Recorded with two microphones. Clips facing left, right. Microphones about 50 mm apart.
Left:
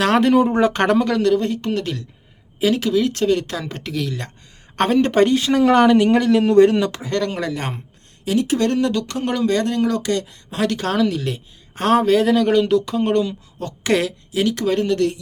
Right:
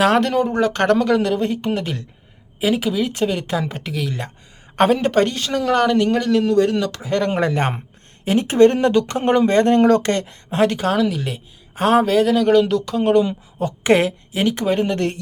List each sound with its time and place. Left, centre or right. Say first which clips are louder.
0.2 s speech: left 3 dB; centre
1.0 s speech: even; centre
6.4 s speech: left 4 dB; left
7.2 s speech: right 4 dB; right
10.8 s a woman's voice: right 1 dB; centre
13.6 s a woman's voice: right 4 dB; centre